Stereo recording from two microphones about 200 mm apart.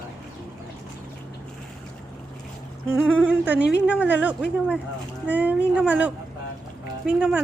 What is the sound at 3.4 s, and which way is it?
A woman's voice, 5° right (ahead or behind).